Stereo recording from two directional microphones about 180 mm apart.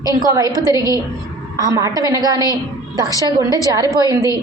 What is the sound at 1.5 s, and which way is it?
Speech, 20° right (ahead or behind).